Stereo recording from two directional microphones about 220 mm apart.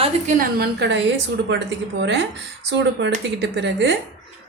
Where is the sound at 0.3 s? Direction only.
50° right (ahead or behind).